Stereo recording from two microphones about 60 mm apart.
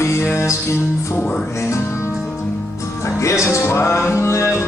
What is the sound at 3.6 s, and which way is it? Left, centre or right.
Music, left.